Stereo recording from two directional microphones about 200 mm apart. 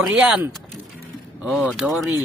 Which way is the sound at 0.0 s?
5° right (ahead or behind).